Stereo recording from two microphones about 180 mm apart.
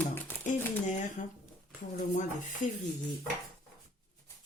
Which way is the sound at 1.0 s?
45° left (ahead or behind).